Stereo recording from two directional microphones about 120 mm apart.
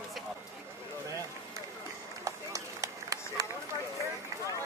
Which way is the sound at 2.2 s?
25° right (ahead or behind).